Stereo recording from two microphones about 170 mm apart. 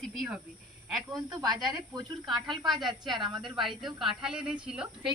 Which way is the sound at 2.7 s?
25° right (ahead or behind).